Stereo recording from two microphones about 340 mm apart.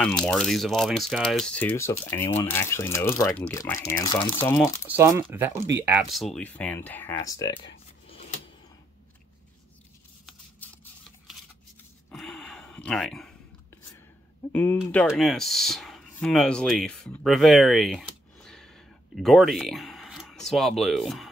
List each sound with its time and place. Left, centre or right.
0.0 s speech: centre
4.6 s speech: centre
8.1 s a sound: centre
10.2 s a sound: centre
12.1 s gasp: centre
14.5 s speech: centre